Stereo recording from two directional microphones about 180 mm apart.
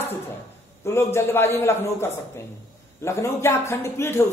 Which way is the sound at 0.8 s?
15° left (ahead or behind).